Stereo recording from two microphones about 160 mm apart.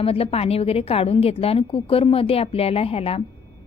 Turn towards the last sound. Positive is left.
turn(degrees=40)  # may be behind; listen again after turning